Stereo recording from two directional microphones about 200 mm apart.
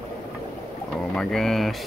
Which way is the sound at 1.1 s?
Centre (ahead or behind).